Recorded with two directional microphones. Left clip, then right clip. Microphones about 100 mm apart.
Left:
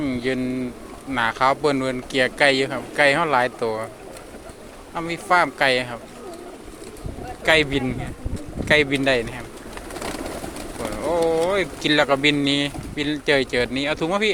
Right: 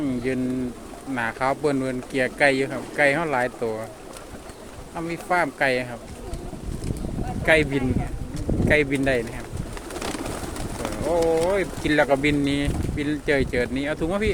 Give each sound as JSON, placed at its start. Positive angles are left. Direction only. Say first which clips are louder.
{"t": 0.0, "sound": "pigeon", "louder": "left 2 dB", "side_deg": -25}
{"t": 1.1, "sound": "speech", "louder": "left 5 dB", "side_deg": -20}
{"t": 4.9, "sound": "speech", "louder": "left 4 dB", "side_deg": -25}
{"t": 7.4, "sound": "speech", "louder": "left 1 dB", "side_deg": -30}
{"t": 11.1, "sound": "speech", "louder": "left 1 dB", "side_deg": 0}
{"t": 11.5, "sound": "speech", "louder": "left 2 dB", "side_deg": -25}